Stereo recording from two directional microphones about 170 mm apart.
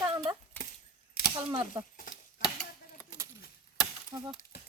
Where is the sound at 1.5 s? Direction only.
30° right (ahead or behind).